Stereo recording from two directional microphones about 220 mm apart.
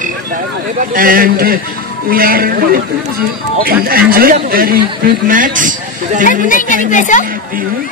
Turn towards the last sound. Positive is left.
turn(degrees=35)  # may be behind; listen again after turning